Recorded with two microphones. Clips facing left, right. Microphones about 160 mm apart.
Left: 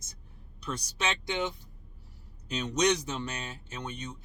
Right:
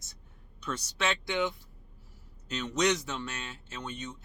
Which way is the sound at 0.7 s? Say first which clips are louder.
Right 1 dB; 20° left (ahead or behind).